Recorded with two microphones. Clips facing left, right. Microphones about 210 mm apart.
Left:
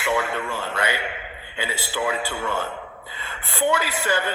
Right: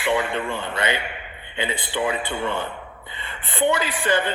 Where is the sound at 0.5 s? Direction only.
5° left (ahead or behind).